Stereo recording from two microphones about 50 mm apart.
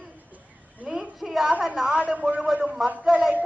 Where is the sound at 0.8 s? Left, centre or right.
Centre.